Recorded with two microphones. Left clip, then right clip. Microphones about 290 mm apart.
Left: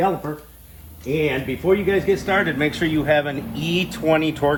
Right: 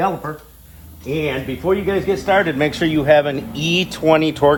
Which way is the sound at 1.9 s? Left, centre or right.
Centre.